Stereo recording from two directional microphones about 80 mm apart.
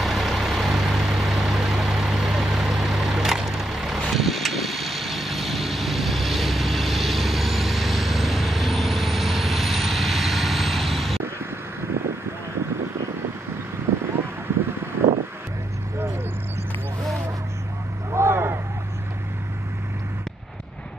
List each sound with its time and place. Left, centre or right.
0.0 s vehicle: centre
18.1 s vehicle: right